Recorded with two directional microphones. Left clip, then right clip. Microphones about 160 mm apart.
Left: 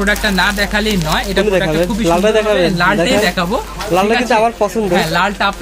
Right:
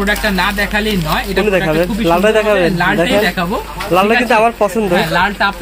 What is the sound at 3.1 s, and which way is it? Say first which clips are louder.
Speech: even; 20° left (ahead or behind).